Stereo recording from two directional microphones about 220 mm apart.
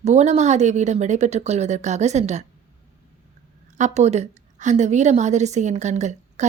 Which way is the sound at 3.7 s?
30° right (ahead or behind).